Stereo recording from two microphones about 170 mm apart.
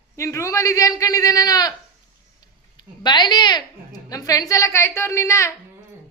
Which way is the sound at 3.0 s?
25° left (ahead or behind).